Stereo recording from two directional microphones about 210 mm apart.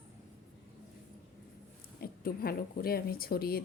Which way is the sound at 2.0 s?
45° left (ahead or behind).